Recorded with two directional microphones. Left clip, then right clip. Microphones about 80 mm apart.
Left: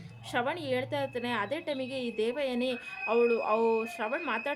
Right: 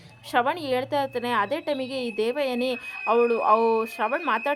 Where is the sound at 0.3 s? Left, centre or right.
Right.